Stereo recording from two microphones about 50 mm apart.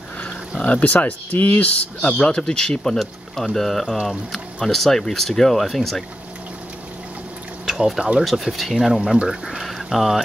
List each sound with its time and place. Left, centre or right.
0.6 s speech: left
3.0 s speech: centre
7.6 s a sound: centre
8.2 s speech: centre